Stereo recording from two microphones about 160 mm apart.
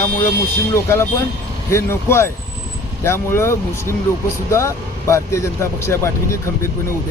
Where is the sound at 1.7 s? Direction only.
15° left (ahead or behind).